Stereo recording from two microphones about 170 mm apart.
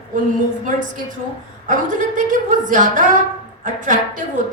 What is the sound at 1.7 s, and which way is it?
A woman's voice, 50° right (ahead or behind).